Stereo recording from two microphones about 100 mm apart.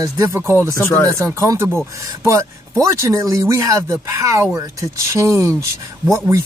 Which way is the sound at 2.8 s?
30° right (ahead or behind).